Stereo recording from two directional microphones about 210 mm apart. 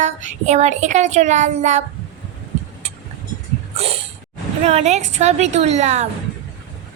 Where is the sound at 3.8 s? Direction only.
30° right (ahead or behind).